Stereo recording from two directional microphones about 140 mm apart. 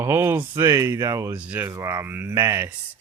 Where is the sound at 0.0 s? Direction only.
20° right (ahead or behind).